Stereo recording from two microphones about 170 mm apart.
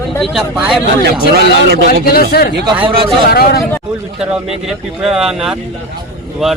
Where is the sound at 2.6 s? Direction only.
30° right (ahead or behind).